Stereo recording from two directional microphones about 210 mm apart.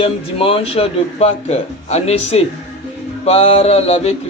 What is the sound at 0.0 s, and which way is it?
A man's voice, 25° left (ahead or behind).